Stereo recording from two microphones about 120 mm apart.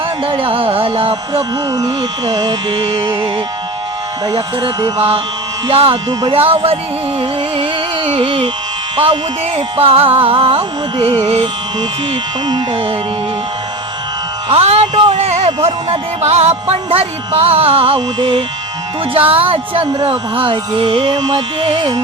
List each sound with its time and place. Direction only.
0.3 s carnatic music: 50° right (ahead or behind)
4.3 s speech: 35° right (ahead or behind)
4.9 s carnatic music: 50° right (ahead or behind)
7.2 s music: 50° right (ahead or behind)
9.6 s carnatic music: 50° right (ahead or behind)
12.5 s carnatic music: 45° right (ahead or behind)
14.5 s music: 60° right (ahead or behind)
19.3 s carnatic music: 50° right (ahead or behind)